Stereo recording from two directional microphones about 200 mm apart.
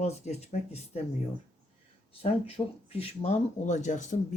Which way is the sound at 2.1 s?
30° left (ahead or behind).